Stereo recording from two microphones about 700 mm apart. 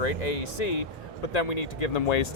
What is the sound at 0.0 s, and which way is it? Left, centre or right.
Speech, left.